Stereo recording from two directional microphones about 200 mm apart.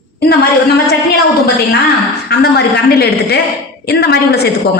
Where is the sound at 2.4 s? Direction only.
55° left (ahead or behind).